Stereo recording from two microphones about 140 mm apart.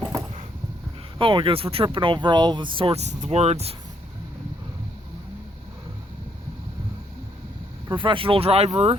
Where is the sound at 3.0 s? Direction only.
55° right (ahead or behind).